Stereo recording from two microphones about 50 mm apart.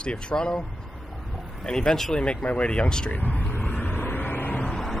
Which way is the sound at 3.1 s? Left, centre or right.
Left.